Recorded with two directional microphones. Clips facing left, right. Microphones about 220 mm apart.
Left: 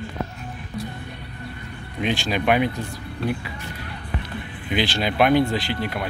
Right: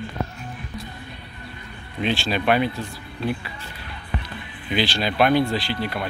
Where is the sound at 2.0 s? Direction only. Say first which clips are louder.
Even; 15° left (ahead or behind).